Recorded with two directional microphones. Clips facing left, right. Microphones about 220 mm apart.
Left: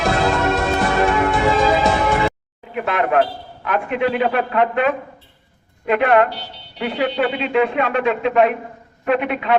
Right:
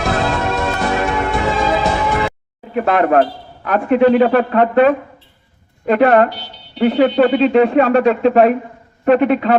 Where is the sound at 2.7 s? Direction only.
40° right (ahead or behind).